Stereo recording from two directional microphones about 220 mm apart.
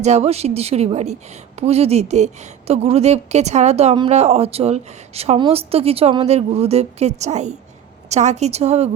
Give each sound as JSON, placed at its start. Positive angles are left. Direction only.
{"t": 0.0, "sound": "a woman's voice", "side_deg": -30}